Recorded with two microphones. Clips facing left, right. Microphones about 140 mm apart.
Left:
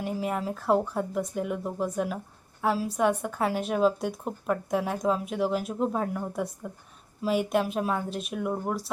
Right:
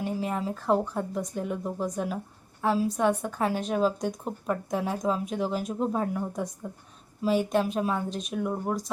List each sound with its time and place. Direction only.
0.0 s a woman's voice: 5° left (ahead or behind)